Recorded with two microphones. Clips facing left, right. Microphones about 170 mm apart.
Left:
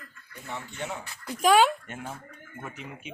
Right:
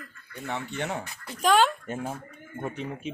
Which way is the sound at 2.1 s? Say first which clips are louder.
Right 4 dB; 10° right (ahead or behind).